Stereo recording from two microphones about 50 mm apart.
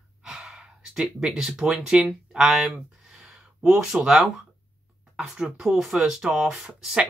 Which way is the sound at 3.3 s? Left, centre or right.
Centre.